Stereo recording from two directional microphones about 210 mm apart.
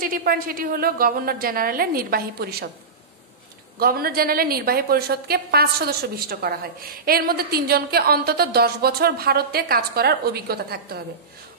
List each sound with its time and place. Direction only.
0.0 s a woman's voice: 45° right (ahead or behind)
3.8 s a woman's voice: 45° right (ahead or behind)